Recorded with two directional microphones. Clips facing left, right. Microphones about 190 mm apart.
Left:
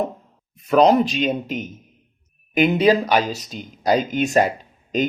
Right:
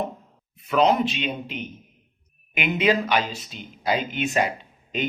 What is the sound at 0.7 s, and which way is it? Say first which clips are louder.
Speech: left 5 dB; 40° left (ahead or behind).